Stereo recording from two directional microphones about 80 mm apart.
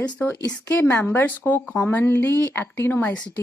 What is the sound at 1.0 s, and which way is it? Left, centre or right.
Speech, left.